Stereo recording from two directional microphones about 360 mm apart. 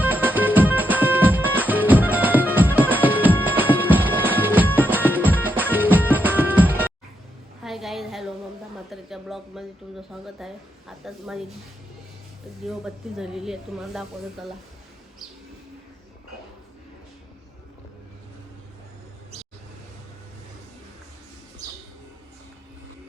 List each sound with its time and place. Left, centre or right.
0.0 s music: centre
7.6 s a sound: centre
10.1 s speech: centre
12.6 s speech: centre